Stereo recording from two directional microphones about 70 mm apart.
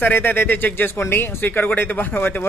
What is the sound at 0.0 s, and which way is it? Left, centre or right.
Speech, left.